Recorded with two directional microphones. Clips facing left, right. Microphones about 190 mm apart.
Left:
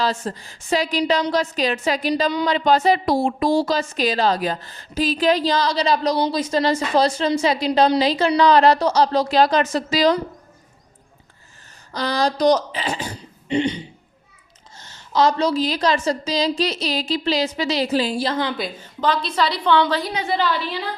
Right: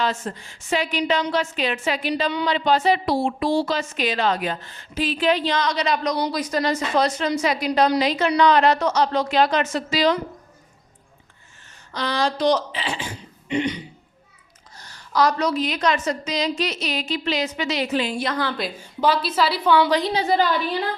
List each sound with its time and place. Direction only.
0.0 s a woman's voice: 35° left (ahead or behind)
11.9 s a woman's voice: 35° left (ahead or behind)
18.8 s a woman's voice: 10° right (ahead or behind)
20.1 s a woman's voice: 40° right (ahead or behind)